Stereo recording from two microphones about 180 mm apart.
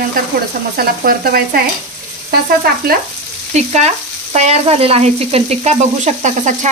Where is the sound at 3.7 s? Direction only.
40° right (ahead or behind).